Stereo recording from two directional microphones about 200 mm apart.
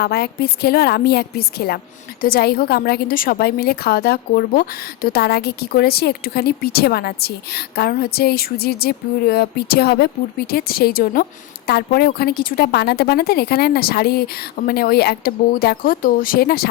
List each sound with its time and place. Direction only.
0.0 s a woman's voice: 55° left (ahead or behind)